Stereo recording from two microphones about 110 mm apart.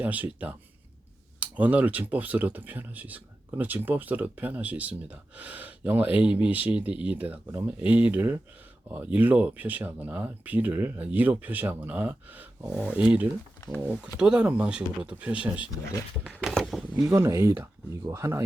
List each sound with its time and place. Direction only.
0.0 s speech: 15° right (ahead or behind)
15.7 s speech: 30° left (ahead or behind)
16.4 s speech: centre (ahead or behind)
17.2 s speech: 25° right (ahead or behind)